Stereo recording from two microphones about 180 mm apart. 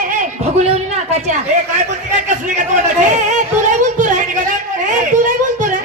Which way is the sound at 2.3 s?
40° right (ahead or behind).